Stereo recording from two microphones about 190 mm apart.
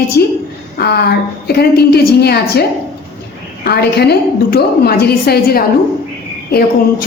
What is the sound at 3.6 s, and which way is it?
A woman's voice, 55° left (ahead or behind).